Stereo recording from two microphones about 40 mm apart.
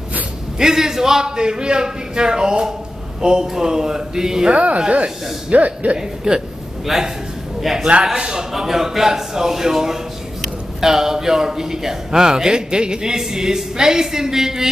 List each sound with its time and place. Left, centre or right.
0.6 s a man's voice: centre
4.5 s speech: right
5.9 s a man's voice: centre
8.0 s a man's voice: centre